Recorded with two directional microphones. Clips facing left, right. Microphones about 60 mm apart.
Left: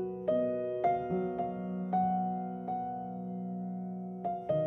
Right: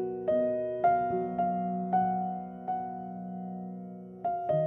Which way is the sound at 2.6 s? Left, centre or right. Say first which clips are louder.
Right 5 dB; right.